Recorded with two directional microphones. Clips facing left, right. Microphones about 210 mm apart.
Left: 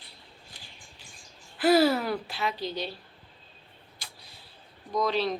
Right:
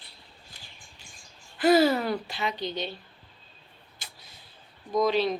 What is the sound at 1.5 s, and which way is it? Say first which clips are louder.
Speech: right 1 dB; centre (ahead or behind).